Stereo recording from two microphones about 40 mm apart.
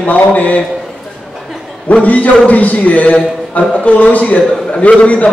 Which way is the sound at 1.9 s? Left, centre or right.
Left.